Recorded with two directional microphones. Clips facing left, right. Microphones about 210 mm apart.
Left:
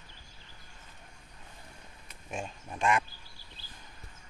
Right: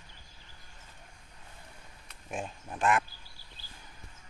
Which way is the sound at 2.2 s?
5° right (ahead or behind).